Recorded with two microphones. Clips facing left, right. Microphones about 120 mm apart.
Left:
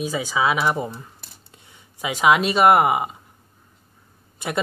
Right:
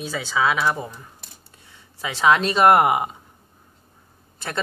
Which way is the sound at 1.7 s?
15° left (ahead or behind).